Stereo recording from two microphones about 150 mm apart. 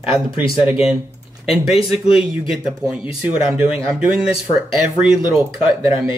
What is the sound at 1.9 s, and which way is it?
Speech, 5° right (ahead or behind).